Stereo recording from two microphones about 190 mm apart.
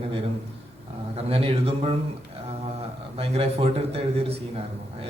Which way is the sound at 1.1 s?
30° right (ahead or behind).